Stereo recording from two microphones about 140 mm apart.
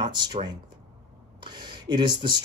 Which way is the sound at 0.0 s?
30° right (ahead or behind).